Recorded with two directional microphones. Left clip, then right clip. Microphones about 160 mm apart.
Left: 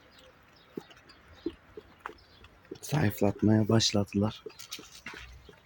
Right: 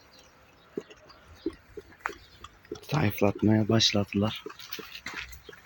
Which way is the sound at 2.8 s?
15° left (ahead or behind).